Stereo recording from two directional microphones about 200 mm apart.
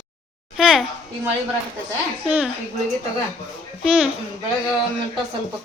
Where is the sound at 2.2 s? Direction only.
5° right (ahead or behind).